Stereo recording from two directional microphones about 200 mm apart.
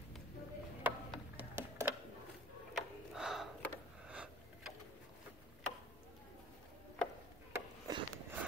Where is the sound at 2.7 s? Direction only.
5° right (ahead or behind).